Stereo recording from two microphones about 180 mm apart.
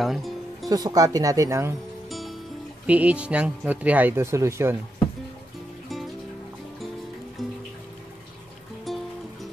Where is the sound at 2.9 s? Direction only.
5° right (ahead or behind).